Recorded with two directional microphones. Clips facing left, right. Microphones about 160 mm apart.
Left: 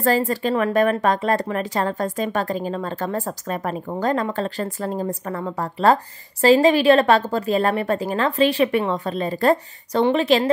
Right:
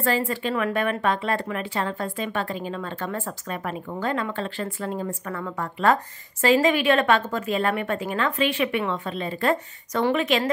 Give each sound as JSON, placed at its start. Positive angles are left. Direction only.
{"t": 0.0, "sound": "speech", "side_deg": 40}